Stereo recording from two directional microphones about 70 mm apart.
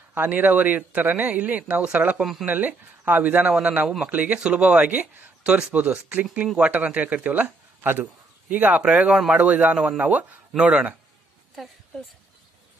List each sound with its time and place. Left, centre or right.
0.1 s a man's voice: right
2.1 s speech: centre
2.4 s a man's voice: right